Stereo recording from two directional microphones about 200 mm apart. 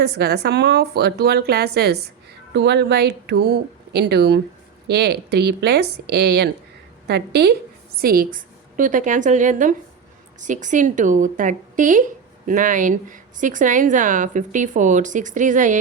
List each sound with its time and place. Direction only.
0.0 s a woman's voice: 55° right (ahead or behind); by 15.8 s 40° right (ahead or behind)